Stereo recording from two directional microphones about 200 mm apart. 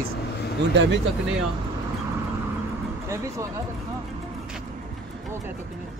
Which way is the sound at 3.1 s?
15° right (ahead or behind).